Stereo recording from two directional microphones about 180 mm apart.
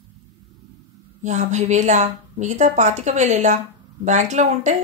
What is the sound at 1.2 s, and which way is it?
A woman's voice, 40° right (ahead or behind).